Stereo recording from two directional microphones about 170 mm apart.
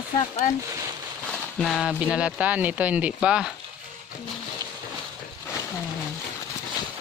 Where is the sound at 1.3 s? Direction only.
Centre (ahead or behind).